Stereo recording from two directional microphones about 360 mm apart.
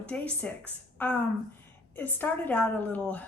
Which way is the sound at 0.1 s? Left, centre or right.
Centre.